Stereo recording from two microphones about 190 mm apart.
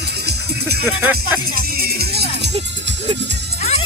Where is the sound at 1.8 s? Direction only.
55° right (ahead or behind).